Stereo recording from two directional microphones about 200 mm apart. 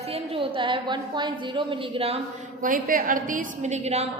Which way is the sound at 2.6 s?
45° right (ahead or behind).